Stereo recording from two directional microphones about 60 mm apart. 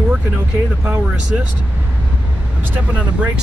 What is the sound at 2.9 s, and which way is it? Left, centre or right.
Speech, right.